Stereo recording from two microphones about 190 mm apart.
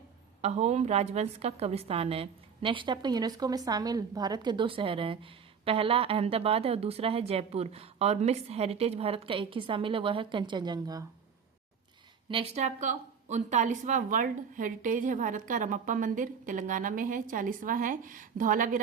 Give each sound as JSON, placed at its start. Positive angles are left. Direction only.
{"t": 0.4, "sound": "a woman's voice", "side_deg": -35}
{"t": 12.3, "sound": "speech", "side_deg": -30}